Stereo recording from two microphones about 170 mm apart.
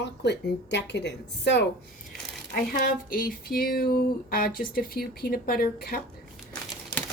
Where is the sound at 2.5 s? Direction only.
55° left (ahead or behind).